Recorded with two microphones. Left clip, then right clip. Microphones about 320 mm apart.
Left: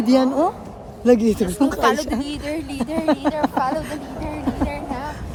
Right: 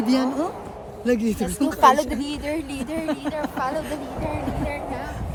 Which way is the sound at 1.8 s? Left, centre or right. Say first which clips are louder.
Right 6 dB; centre.